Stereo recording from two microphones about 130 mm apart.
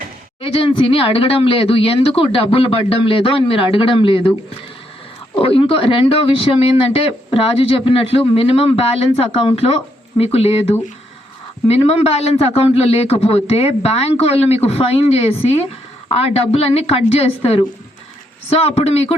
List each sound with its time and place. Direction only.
0.4 s speech: 45° left (ahead or behind)
5.4 s speech: 45° left (ahead or behind)
11.7 s speech: 50° left (ahead or behind)